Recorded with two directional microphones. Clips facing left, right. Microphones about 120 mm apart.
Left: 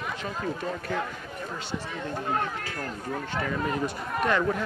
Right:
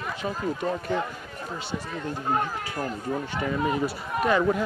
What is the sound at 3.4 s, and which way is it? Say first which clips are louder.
Speech: right 4 dB; 10° right (ahead or behind).